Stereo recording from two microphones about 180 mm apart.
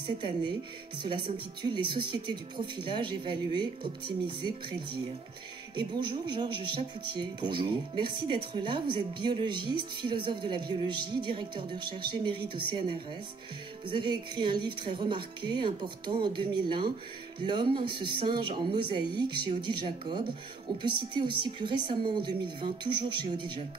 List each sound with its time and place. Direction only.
0.2 s speech: 25° right (ahead or behind)
5.8 s speech: 25° right (ahead or behind)